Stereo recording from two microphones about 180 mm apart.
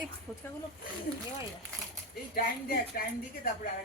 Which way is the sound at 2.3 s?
60° left (ahead or behind).